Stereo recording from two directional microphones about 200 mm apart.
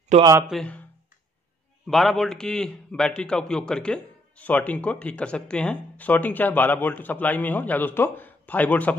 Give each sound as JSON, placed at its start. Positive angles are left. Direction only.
{"t": 0.2, "sound": "speech", "side_deg": -15}
{"t": 0.5, "sound": "speech", "side_deg": 5}
{"t": 1.9, "sound": "a man's voice", "side_deg": 0}